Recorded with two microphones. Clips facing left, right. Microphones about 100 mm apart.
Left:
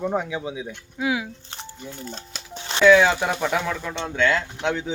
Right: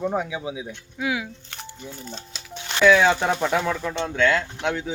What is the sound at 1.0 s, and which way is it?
Speech, 25° left (ahead or behind).